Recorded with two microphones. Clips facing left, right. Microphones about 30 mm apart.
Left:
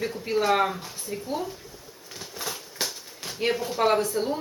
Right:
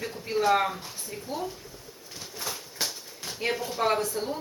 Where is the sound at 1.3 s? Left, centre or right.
Left.